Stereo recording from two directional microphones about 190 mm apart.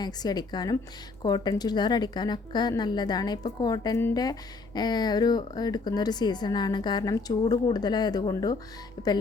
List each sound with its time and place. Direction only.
0.0 s a woman's voice: 20° left (ahead or behind)